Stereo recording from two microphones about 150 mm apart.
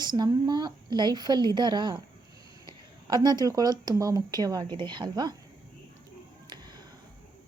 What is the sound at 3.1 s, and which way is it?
A woman's voice, 30° right (ahead or behind).